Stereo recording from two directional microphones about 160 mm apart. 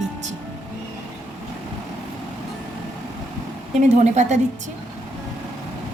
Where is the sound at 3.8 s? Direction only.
45° right (ahead or behind).